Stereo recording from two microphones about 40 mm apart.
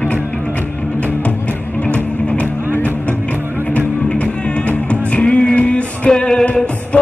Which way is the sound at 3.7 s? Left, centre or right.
Left.